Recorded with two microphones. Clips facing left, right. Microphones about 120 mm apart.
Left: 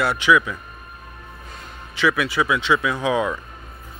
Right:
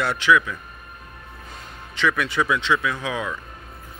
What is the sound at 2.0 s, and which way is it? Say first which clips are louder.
Speech: left 2 dB; 5° left (ahead or behind).